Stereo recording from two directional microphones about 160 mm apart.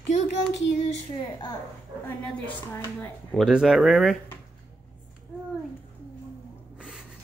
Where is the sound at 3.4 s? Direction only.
5° right (ahead or behind).